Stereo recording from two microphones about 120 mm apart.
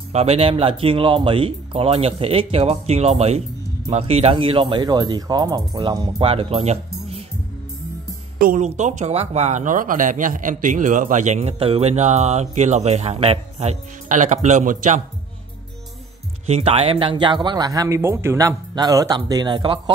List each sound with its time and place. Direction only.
0.1 s speech: 60° right (ahead or behind); by 6.2 s 40° right (ahead or behind)
6.2 s speech: 50° right (ahead or behind)
8.5 s speech: 80° right
11.5 s speech: 50° right (ahead or behind); by 15.0 s 90° right
16.4 s speech: 60° right (ahead or behind); by 18.6 s 20° right (ahead or behind)
18.8 s speech: 30° right (ahead or behind)